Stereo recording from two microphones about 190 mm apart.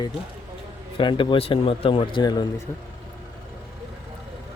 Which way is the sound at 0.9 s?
25° left (ahead or behind).